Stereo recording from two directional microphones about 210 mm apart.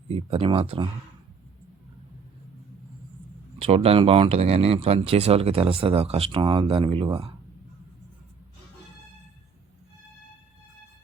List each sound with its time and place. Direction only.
0.1 s speech: 25° right (ahead or behind)
3.8 s speech: 25° right (ahead or behind)